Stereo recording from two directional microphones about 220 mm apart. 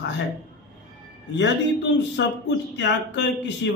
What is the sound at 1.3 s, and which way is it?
A man's voice, 55° left (ahead or behind).